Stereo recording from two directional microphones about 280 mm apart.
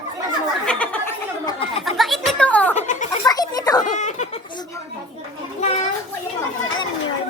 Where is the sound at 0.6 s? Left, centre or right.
Centre.